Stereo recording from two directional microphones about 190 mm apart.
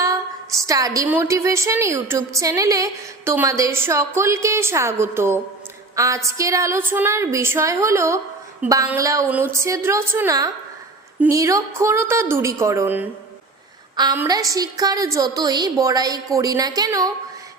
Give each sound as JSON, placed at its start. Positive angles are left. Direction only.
{"t": 0.0, "sound": "a woman's voice", "side_deg": -15}
{"t": 13.9, "sound": "a woman's voice", "side_deg": -20}